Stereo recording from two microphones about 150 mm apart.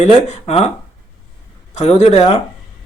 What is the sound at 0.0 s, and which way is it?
Speech, 50° left (ahead or behind).